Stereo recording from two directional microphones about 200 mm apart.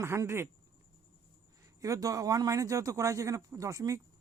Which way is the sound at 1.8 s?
15° right (ahead or behind).